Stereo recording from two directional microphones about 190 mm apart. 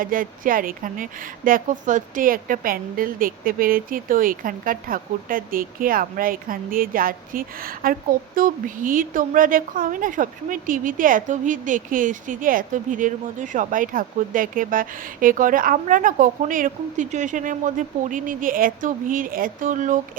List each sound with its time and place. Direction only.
0.0 s a woman's voice: 45° right (ahead or behind)